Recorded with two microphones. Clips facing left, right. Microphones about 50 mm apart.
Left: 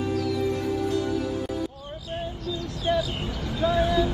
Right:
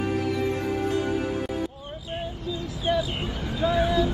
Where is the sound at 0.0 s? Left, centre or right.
Right.